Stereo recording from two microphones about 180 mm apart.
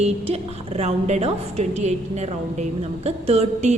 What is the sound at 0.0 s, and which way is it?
A woman's voice, 35° right (ahead or behind).